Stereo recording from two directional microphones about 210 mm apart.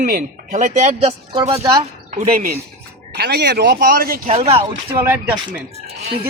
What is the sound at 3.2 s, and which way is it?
Speech, 50° right (ahead or behind).